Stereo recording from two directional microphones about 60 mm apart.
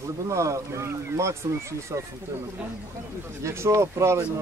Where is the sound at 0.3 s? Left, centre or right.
Right.